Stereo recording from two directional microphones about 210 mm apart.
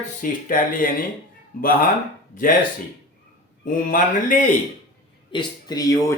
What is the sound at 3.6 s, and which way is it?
Speech, 40° left (ahead or behind).